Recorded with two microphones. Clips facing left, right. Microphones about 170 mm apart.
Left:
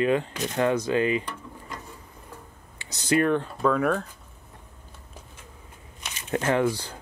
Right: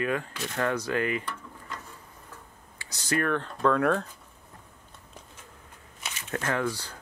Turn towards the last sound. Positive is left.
turn(degrees=20)  # may be behind; listen again after turning